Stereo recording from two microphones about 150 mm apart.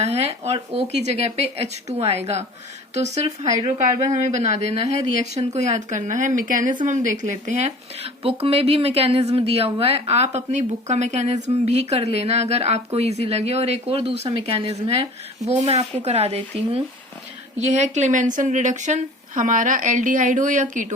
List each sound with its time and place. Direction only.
0.0 s a woman's voice: 45° right (ahead or behind)